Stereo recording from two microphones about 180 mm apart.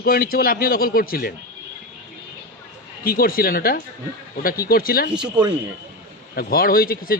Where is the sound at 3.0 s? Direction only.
55° left (ahead or behind).